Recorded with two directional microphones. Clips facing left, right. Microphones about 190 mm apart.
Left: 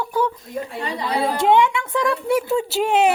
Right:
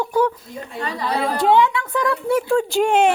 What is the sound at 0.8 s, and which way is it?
A woman's voice, 20° left (ahead or behind).